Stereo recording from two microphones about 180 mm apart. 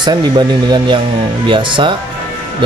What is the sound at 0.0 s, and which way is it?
A man's voice, 25° right (ahead or behind).